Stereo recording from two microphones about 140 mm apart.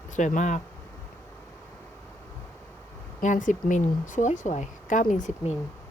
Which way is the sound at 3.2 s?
65° left (ahead or behind).